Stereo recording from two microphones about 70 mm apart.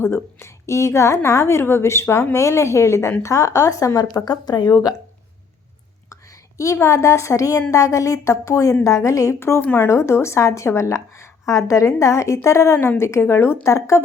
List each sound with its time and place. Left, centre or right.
0.0 s a woman's voice: left
4.1 s speech: left
4.7 s speech: left
6.7 s a woman's voice: left